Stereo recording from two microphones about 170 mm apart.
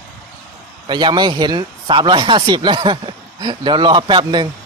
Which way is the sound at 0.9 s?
25° right (ahead or behind).